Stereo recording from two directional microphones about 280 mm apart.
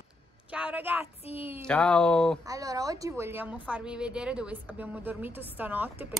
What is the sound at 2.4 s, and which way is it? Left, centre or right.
A woman's voice, centre.